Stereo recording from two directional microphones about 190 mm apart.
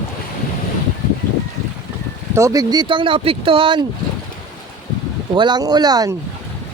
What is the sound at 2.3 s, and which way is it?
Speech, 15° right (ahead or behind).